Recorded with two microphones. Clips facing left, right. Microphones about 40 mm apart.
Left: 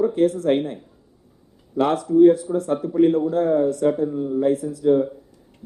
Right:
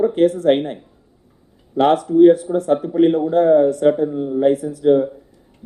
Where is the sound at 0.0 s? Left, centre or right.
Right.